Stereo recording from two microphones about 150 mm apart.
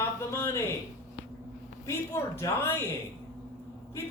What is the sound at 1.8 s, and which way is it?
Speech, 20° left (ahead or behind).